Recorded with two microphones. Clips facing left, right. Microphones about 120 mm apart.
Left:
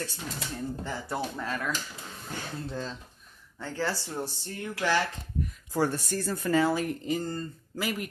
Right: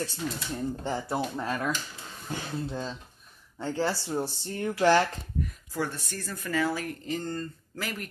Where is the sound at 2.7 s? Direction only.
15° right (ahead or behind).